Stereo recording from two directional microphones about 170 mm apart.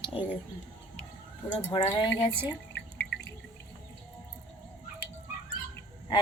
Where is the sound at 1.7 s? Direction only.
30° left (ahead or behind).